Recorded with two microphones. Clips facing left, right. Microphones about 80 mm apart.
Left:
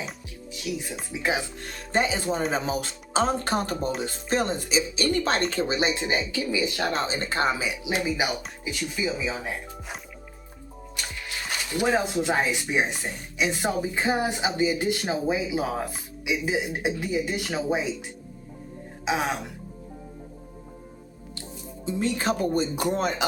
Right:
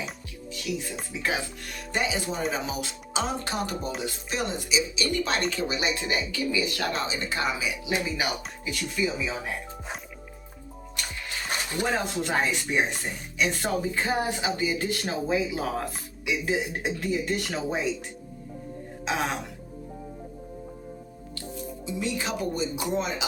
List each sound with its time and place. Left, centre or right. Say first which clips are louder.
1.1 s speech: left 3 dB; centre
1.6 s speech: left 6 dB; left
6.9 s speech: left 3 dB; left
7.9 s speech: left 3 dB; centre
8.7 s speech: even; centre
12.2 s speech: left 2 dB; centre
19.0 s speech: left 2 dB; centre
21.8 s speech: left 5 dB; left